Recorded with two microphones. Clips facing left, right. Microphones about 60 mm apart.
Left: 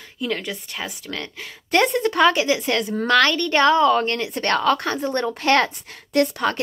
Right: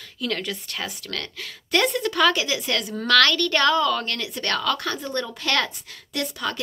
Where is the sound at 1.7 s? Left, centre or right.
Left.